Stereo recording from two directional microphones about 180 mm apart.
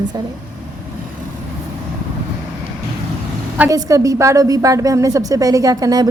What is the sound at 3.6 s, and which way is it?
A woman's voice, 15° right (ahead or behind).